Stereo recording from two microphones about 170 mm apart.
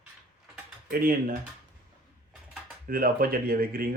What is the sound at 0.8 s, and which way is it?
Speech, 55° right (ahead or behind).